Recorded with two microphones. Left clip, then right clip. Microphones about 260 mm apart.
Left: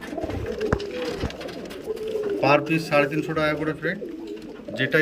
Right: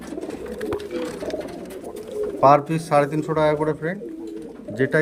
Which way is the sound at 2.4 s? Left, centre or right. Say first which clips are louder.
Right 5 dB; centre.